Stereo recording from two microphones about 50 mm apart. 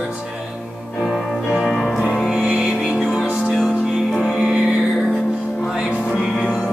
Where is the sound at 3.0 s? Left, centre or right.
Centre.